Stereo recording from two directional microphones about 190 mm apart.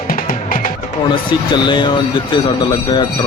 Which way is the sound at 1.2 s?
25° left (ahead or behind).